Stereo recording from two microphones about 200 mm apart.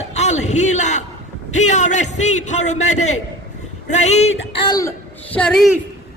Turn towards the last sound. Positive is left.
turn(degrees=0)  # may be behind; listen again after turning